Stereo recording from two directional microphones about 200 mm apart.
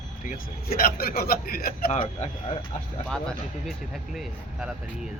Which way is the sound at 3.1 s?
Centre (ahead or behind).